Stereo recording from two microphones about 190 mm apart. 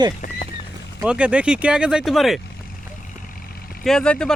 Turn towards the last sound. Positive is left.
turn(degrees=5)  # may be behind; listen again after turning